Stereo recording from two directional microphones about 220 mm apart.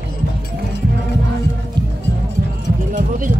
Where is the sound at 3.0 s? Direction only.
35° right (ahead or behind).